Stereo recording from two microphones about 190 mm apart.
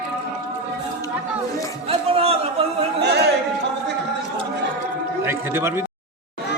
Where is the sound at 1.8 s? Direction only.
30° right (ahead or behind).